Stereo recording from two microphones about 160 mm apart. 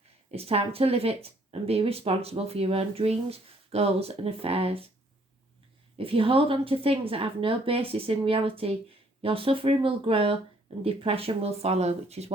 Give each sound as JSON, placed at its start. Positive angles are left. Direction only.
{"t": 0.3, "sound": "speech", "side_deg": -40}
{"t": 6.0, "sound": "speech", "side_deg": -35}